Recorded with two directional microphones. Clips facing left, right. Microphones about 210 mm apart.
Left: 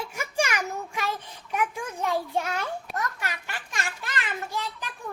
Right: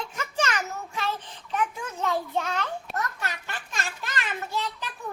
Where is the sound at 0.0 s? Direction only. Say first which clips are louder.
Left 1 dB; 10° left (ahead or behind).